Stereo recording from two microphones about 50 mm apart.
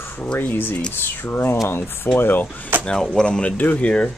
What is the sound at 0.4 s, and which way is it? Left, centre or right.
Speech, left.